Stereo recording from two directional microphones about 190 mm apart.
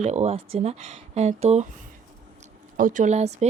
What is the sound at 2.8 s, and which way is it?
Speech, 45° right (ahead or behind).